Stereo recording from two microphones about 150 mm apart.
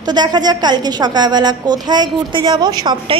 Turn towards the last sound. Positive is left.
turn(degrees=-30)  # may be behind; listen again after turning